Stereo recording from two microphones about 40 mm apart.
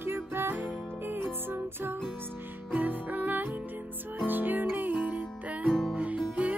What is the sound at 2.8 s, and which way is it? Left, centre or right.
Music, right.